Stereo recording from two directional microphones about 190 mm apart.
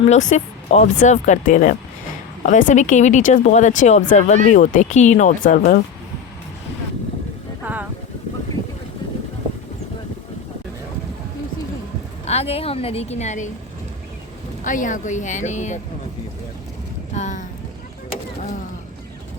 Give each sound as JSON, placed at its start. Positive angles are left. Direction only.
{"t": 0.1, "sound": "speech", "side_deg": 40}
{"t": 7.6, "sound": "a sound", "side_deg": -10}
{"t": 12.2, "sound": "speech", "side_deg": 35}
{"t": 14.6, "sound": "speech", "side_deg": 45}
{"t": 17.2, "sound": "boat", "side_deg": 40}